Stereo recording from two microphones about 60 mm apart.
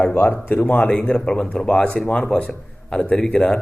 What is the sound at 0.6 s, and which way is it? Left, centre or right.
A man's voice, left.